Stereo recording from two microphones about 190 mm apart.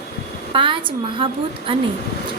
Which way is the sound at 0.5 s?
25° right (ahead or behind).